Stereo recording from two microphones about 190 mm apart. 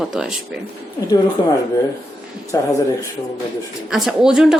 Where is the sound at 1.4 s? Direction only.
25° left (ahead or behind).